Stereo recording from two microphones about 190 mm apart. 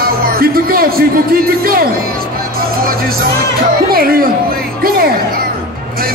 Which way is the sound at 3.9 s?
50° right (ahead or behind).